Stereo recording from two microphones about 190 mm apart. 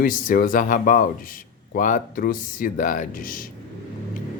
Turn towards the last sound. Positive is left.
turn(degrees=45)  # may be behind; listen again after turning